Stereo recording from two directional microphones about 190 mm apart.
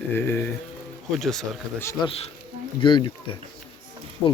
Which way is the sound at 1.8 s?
15° left (ahead or behind).